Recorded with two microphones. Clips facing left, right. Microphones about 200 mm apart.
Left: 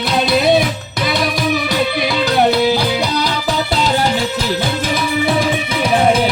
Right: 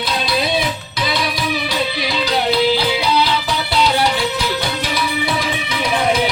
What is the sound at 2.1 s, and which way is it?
Music, 50° left (ahead or behind).